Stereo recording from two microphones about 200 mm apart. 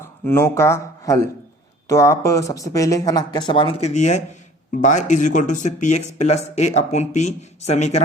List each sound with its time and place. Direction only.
0.0 s speech: 15° left (ahead or behind); by 8.0 s 35° left (ahead or behind)